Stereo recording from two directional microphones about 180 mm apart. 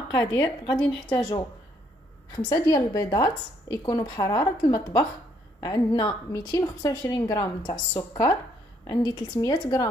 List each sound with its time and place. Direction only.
0.2 s a woman's voice: 15° left (ahead or behind)
2.5 s speech: 20° left (ahead or behind)